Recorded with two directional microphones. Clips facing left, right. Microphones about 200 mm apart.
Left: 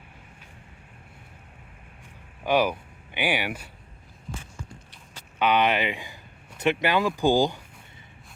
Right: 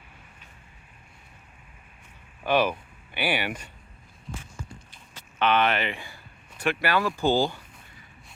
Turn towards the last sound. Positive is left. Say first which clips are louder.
# left 2 dB
turn(degrees=15)  # may be behind; listen again after turning